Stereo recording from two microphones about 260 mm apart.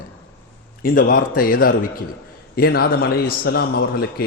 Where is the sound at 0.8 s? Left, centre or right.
Left.